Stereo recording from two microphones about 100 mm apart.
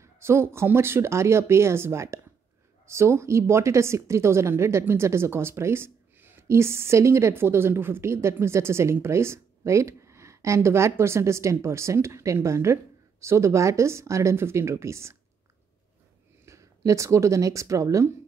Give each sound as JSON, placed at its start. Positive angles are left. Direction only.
{"t": 0.0, "sound": "speech", "side_deg": -25}
{"t": 16.4, "sound": "speech", "side_deg": -30}